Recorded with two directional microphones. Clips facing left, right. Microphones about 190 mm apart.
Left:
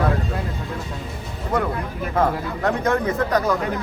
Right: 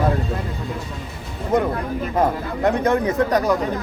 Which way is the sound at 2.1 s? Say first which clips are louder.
Even; 15° right (ahead or behind).